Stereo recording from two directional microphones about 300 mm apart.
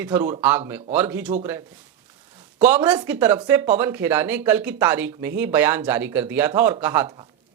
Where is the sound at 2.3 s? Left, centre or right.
Centre.